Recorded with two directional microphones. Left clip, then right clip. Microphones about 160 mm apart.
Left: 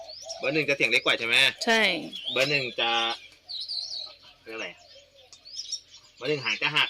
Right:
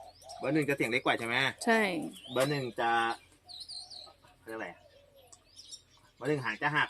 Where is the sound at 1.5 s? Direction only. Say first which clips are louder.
Left 6 dB; 10° right (ahead or behind).